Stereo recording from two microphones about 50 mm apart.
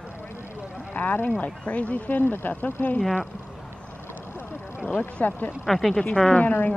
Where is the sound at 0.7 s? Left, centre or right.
Left.